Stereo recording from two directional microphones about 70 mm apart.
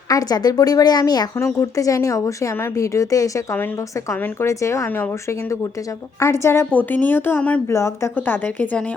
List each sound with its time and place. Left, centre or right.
0.1 s speech: left
1.4 s speech: left
6.1 s a woman's voice: left
6.7 s speech: left
7.7 s speech: left
8.1 s speech: left